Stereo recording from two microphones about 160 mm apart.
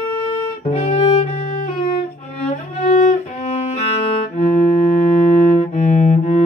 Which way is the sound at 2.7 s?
45° left (ahead or behind).